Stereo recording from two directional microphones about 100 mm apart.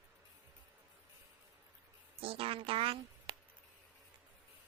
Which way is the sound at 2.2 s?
65° right (ahead or behind).